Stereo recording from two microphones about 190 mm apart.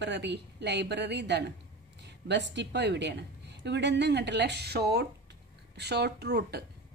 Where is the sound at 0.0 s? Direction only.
65° right (ahead or behind).